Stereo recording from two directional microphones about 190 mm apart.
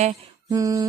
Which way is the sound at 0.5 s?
20° right (ahead or behind).